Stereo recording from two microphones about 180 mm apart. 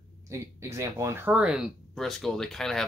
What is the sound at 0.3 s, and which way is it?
Speech, 15° right (ahead or behind).